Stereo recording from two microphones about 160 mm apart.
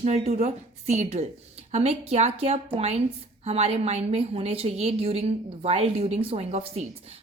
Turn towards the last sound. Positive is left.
turn(degrees=-40)  # may be behind; listen again after turning